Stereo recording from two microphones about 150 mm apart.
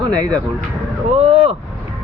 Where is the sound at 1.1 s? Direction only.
45° right (ahead or behind).